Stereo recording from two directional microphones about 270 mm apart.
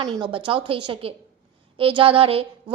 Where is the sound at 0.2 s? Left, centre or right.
Centre.